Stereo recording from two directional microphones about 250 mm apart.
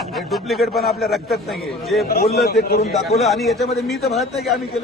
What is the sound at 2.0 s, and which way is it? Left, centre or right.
Speech, left.